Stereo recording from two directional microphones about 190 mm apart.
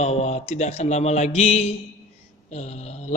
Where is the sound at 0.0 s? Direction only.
35° left (ahead or behind).